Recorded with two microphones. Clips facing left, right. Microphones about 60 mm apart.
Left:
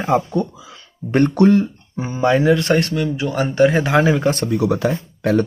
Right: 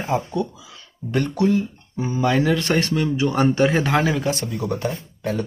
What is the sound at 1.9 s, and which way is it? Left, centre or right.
Speech, left.